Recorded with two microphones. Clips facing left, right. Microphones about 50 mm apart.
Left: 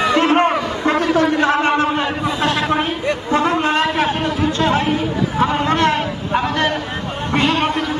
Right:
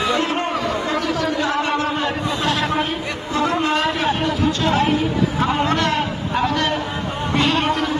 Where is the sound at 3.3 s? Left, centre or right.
Left.